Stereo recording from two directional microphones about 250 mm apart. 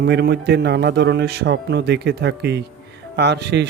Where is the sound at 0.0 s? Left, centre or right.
Right.